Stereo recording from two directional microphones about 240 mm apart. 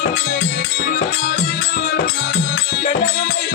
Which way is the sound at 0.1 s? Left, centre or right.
Left.